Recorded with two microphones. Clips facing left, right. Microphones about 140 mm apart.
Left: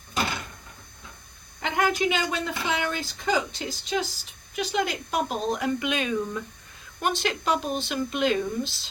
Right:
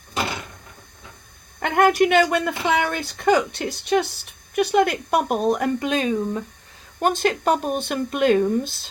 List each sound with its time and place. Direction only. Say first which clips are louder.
1.5 s speech: right 8 dB; 55° right (ahead or behind); by 6.4 s 35° right (ahead or behind)
7.0 s speech: right 7 dB; 45° right (ahead or behind)